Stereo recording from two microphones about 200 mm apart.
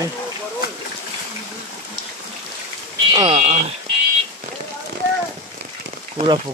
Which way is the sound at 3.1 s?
30° right (ahead or behind).